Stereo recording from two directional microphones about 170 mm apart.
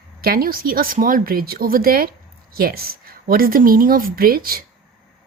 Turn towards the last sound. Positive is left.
turn(degrees=-60)  # may be behind; listen again after turning